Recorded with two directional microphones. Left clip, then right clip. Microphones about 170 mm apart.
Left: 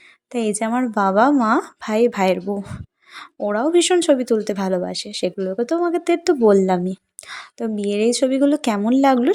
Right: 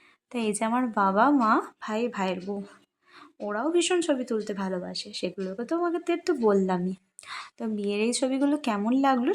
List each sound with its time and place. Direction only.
0.3 s speech: 30° left (ahead or behind)